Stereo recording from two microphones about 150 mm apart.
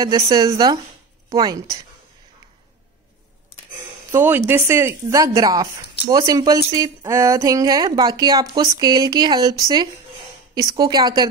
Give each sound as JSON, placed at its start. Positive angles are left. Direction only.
{"t": 0.0, "sound": "speech", "side_deg": -25}
{"t": 4.1, "sound": "speech", "side_deg": -15}